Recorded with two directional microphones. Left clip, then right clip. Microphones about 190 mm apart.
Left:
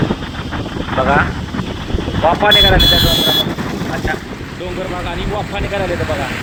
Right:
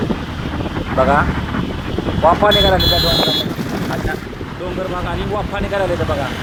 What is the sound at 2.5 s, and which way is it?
Speech, 65° left (ahead or behind).